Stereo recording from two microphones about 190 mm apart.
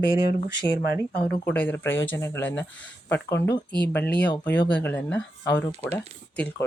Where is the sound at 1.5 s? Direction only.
10° left (ahead or behind).